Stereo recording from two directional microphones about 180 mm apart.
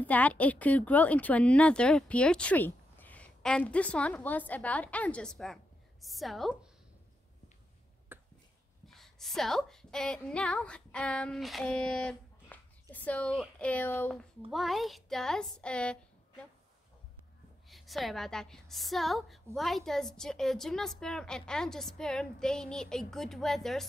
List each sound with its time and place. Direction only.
0.0 s speech: 10° left (ahead or behind)
8.1 s a sound: 10° right (ahead or behind)
8.8 s a woman's voice: centre (ahead or behind)
17.6 s a woman's voice: centre (ahead or behind)